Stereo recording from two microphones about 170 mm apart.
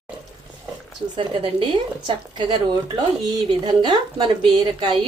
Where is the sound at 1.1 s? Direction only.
30° right (ahead or behind).